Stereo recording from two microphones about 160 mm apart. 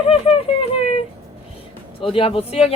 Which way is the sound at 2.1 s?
35° left (ahead or behind).